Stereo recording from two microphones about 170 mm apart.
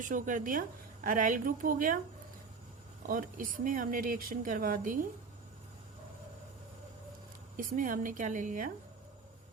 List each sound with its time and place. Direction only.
0.0 s a woman's voice: 50° right (ahead or behind)
3.1 s speech: 55° right (ahead or behind)
7.5 s a woman's voice: 50° right (ahead or behind)